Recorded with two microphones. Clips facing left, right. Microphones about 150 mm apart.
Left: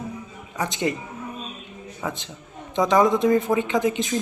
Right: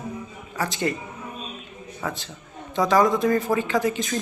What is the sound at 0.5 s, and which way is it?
Speech, 20° left (ahead or behind).